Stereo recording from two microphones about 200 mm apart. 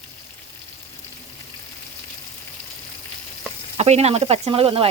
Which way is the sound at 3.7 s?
30° right (ahead or behind).